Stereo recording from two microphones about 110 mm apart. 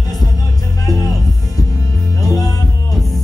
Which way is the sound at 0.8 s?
35° left (ahead or behind).